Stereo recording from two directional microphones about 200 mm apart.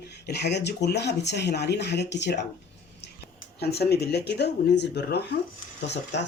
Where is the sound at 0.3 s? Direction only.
55° left (ahead or behind).